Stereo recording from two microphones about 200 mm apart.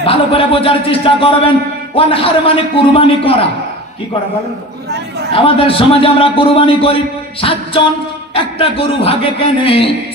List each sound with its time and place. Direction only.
0.0 s a man's voice: 30° left (ahead or behind)
5.3 s a man's voice: 25° left (ahead or behind)